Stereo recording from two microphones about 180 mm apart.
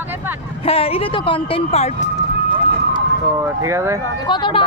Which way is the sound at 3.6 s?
15° right (ahead or behind).